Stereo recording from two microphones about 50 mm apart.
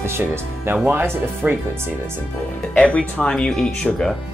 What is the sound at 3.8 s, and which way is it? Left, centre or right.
Speech, left.